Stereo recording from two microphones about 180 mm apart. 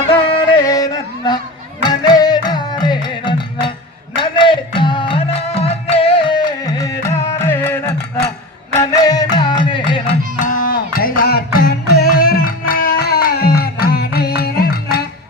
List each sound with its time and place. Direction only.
0.1 s music: 30° left (ahead or behind)
0.6 s a sound: 20° left (ahead or behind)
1.8 s music: 25° left (ahead or behind)
10.4 s music: 50° left (ahead or behind)